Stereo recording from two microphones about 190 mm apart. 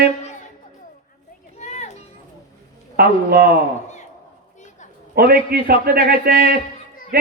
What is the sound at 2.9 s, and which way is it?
Speech, 55° right (ahead or behind).